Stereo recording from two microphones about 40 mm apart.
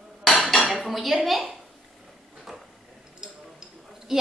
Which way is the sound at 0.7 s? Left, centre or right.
Centre.